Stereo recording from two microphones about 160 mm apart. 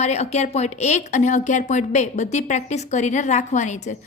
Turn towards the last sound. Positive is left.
turn(degrees=50)  # may be behind; listen again after turning